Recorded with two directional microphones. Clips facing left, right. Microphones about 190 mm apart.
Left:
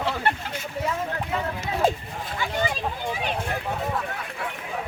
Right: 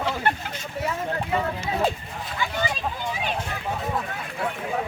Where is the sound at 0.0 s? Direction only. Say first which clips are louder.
Even; centre (ahead or behind).